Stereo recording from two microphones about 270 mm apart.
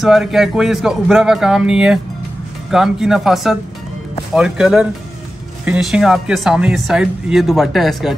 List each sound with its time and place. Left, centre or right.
0.0 s speech: centre